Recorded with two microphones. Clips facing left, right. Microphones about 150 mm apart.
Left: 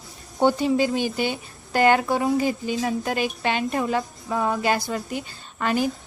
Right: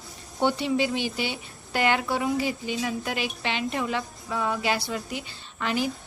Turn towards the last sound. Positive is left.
turn(degrees=45)  # may be behind; listen again after turning